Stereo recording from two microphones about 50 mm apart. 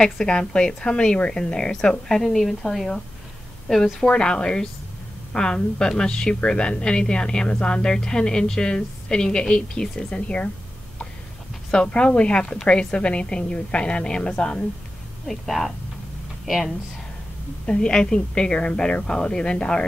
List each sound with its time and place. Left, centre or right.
0.0 s a woman's voice: centre
4.1 s a woman's voice: centre
11.7 s a woman's voice: centre
15.2 s speech: centre
17.6 s a woman's voice: centre